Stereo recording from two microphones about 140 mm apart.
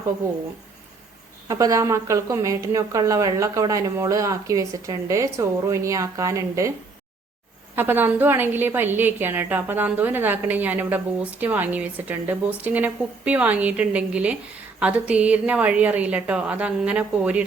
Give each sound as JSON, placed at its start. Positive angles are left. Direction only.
{"t": 1.5, "sound": "a woman's voice", "side_deg": -25}
{"t": 7.8, "sound": "a woman's voice", "side_deg": -15}